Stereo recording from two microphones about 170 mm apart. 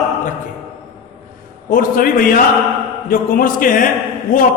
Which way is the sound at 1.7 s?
60° left (ahead or behind).